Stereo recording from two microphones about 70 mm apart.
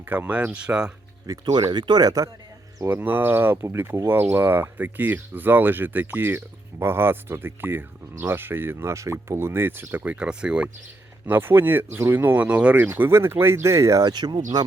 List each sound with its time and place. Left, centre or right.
0.0 s speech: right
1.5 s speech: right
2.9 s speech: right
10.2 s speech: centre
11.3 s speech: right
12.5 s speech: centre
12.7 s speech: right
14.0 s speech: right